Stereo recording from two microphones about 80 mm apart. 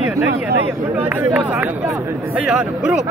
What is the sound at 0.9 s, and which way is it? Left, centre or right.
Speech, centre.